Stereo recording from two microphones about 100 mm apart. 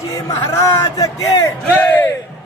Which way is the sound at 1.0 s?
35° left (ahead or behind).